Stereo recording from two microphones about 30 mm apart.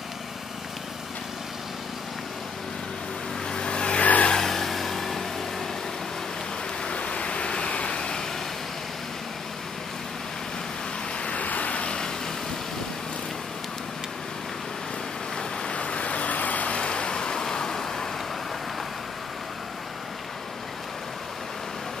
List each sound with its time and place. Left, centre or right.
3.5 s vehicle: left
4.0 s vehicle: left
4.4 s vehicle: centre
6.8 s vehicle: left
11.2 s vehicle: left
11.7 s vehicle: left
15.7 s vehicle: left
16.7 s vehicle: left; by 18.0 s centre